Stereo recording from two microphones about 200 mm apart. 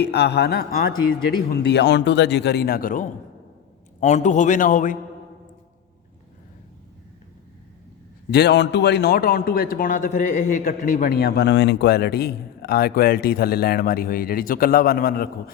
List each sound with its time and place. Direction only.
0.0 s a man's voice: 55° left (ahead or behind); by 4.9 s 40° left (ahead or behind)
8.3 s a man's voice: 55° left (ahead or behind)